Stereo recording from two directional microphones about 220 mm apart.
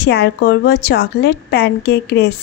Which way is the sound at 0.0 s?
50° left (ahead or behind).